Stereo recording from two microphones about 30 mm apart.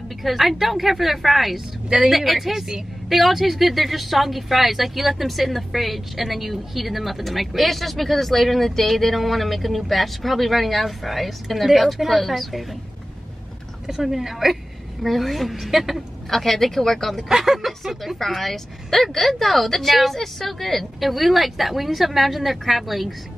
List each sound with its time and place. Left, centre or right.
0.2 s a woman's voice: centre
13.8 s a woman's voice: centre
16.3 s a woman's voice: centre
17.3 s a woman's voice: centre
17.6 s a woman's voice: centre